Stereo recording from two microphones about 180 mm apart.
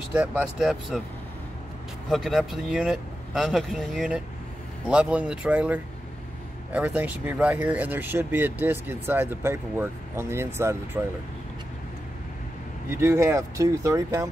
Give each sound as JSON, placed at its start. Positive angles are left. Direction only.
{"t": 0.1, "sound": "speech", "side_deg": -5}
{"t": 2.0, "sound": "speech", "side_deg": 0}
{"t": 12.9, "sound": "speech", "side_deg": -15}